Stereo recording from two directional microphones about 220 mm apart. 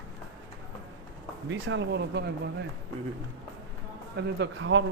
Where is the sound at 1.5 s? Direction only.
55° right (ahead or behind).